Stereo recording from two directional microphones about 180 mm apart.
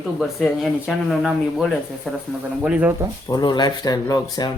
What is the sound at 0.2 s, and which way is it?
Speech, centre (ahead or behind).